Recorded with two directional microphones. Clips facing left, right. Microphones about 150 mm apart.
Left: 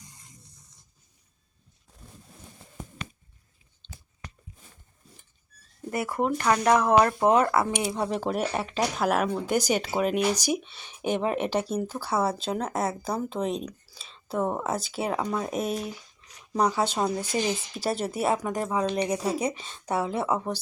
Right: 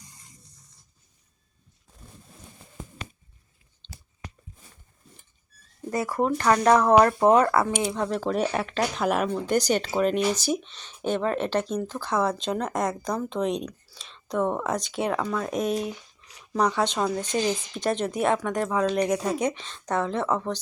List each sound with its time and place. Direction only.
5.9 s speech: 25° left (ahead or behind)
6.5 s speech: 5° left (ahead or behind)
7.3 s speech: 20° left (ahead or behind)